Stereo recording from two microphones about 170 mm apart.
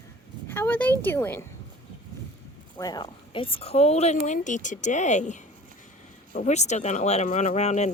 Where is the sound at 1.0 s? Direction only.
10° left (ahead or behind).